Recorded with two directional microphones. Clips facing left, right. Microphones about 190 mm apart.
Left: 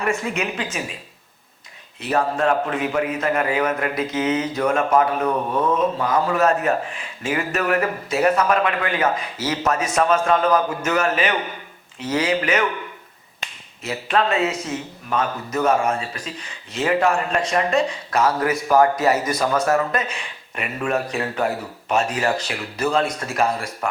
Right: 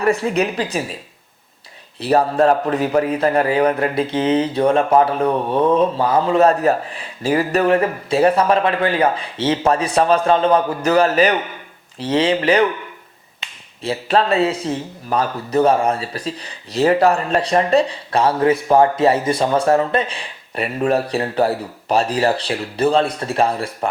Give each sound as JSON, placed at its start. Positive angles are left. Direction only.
{"t": 0.0, "sound": "a man's voice", "side_deg": -35}
{"t": 2.0, "sound": "a man's voice", "side_deg": -35}
{"t": 13.8, "sound": "a man's voice", "side_deg": -35}